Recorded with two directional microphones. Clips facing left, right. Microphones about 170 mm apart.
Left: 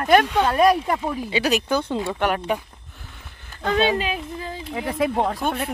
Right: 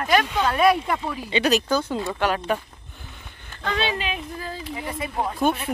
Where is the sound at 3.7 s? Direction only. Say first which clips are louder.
Left 5 dB; 45° left (ahead or behind).